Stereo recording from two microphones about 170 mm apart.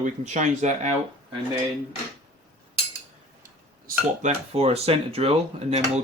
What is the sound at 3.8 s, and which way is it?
Speech, 45° right (ahead or behind).